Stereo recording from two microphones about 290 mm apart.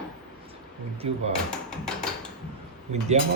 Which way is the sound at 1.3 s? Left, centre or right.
Centre.